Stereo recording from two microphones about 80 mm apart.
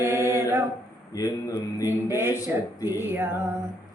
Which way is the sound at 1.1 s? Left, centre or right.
Left.